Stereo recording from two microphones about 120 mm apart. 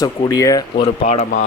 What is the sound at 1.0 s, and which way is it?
Speech, 75° left (ahead or behind).